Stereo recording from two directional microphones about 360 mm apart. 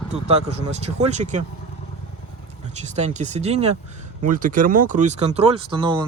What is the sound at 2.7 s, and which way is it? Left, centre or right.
Speech, centre.